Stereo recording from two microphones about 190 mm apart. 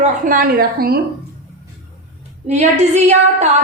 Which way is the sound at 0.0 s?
45° right (ahead or behind).